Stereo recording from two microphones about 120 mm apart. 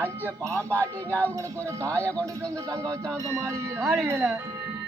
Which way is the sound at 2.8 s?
10° left (ahead or behind).